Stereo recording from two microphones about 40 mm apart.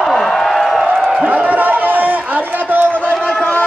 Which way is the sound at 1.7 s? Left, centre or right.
Right.